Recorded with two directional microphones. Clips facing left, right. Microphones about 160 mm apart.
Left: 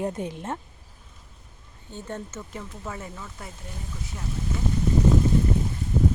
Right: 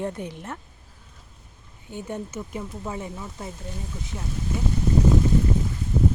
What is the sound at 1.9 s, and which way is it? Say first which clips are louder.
Speech: right 3 dB; 10° right (ahead or behind).